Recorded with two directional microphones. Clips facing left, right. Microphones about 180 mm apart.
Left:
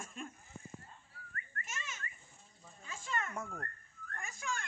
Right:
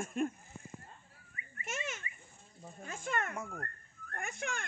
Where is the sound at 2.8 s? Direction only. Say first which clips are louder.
Right 4 dB; 55° right (ahead or behind).